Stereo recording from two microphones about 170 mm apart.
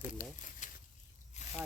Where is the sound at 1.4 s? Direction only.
40° left (ahead or behind).